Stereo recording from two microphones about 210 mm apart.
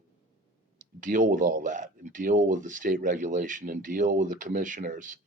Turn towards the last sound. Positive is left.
turn(degrees=-40)  # may be behind; listen again after turning